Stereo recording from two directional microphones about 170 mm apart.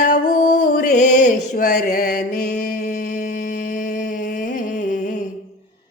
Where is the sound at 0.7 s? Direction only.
55° left (ahead or behind).